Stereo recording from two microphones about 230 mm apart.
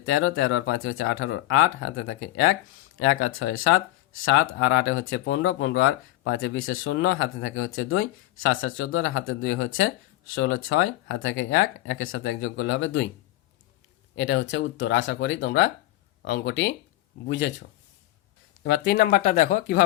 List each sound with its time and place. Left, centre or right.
0.0 s speech: left
14.2 s speech: left